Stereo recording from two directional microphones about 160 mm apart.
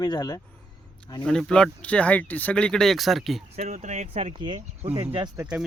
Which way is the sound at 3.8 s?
45° right (ahead or behind).